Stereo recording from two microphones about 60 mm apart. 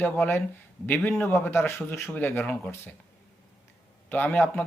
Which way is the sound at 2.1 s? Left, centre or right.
Left.